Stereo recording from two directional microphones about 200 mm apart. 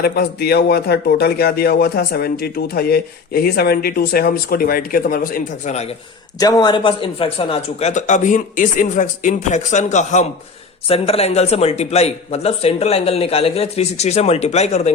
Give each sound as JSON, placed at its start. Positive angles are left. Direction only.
{"t": 0.0, "sound": "speech", "side_deg": 50}
{"t": 6.4, "sound": "speech", "side_deg": 20}